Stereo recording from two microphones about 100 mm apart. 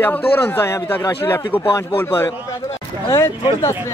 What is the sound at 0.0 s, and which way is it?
Speech, 20° left (ahead or behind).